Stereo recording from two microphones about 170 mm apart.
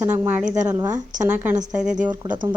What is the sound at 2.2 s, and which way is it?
Speech, 25° right (ahead or behind).